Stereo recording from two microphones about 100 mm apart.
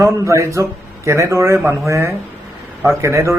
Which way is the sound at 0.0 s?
30° right (ahead or behind).